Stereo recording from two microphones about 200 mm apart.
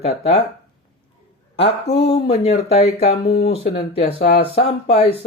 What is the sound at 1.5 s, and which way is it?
Speech, 30° left (ahead or behind).